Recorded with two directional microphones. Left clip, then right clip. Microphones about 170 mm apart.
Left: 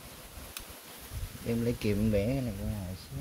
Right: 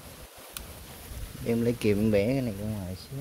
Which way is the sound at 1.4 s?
35° right (ahead or behind).